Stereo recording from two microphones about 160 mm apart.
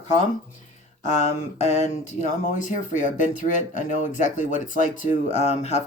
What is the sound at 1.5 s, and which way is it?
Speech, 45° left (ahead or behind).